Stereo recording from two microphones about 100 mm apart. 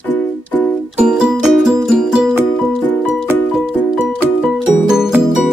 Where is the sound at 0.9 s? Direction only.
5° right (ahead or behind).